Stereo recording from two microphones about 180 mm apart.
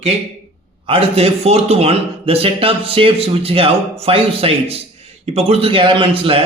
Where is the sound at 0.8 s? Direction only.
30° right (ahead or behind).